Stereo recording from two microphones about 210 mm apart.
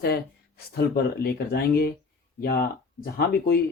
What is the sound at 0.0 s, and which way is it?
Speech, 45° left (ahead or behind).